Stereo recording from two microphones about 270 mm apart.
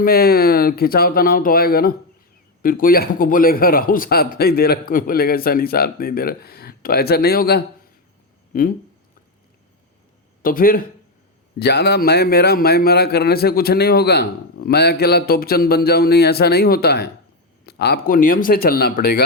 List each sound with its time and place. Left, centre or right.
0.0 s speech: left
10.4 s speech: left